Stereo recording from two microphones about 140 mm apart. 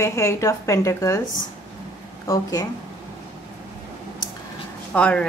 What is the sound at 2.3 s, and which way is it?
Speech, 25° left (ahead or behind).